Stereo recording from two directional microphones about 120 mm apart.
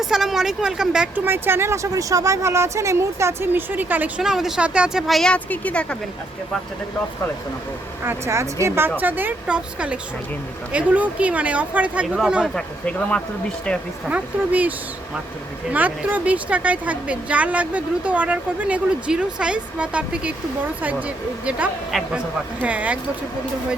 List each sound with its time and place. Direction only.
0.0 s speech: 5° right (ahead or behind)
4.2 s speech: 5° right (ahead or behind)
8.3 s a woman's voice: 25° right (ahead or behind); by 12.5 s 10° right (ahead or behind)
12.5 s speech: 10° left (ahead or behind)
14.1 s a woman's voice: 15° right (ahead or behind)
15.7 s a woman's voice: 15° right (ahead or behind)
21.9 s speech: centre (ahead or behind)
22.6 s a woman's voice: 10° right (ahead or behind)